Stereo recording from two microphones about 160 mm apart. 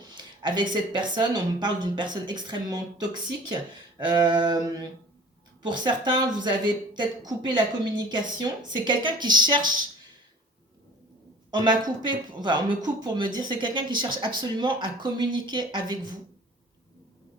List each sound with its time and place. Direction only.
0.4 s speech: 30° right (ahead or behind)
11.5 s speech: 30° right (ahead or behind)